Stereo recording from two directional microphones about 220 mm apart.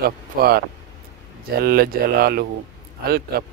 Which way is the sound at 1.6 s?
45° right (ahead or behind).